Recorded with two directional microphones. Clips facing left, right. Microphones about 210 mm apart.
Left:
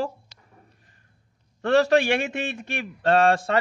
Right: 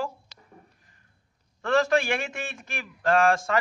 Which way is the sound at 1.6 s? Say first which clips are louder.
Left 4 dB; 35° left (ahead or behind).